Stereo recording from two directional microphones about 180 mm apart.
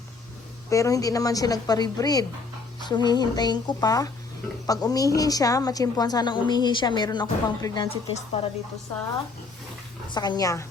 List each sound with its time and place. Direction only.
0.7 s a woman's voice: 20° left (ahead or behind)
10.1 s a woman's voice: 25° left (ahead or behind)